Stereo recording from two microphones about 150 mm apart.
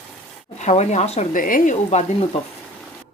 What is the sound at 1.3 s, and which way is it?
Speech, 65° left (ahead or behind).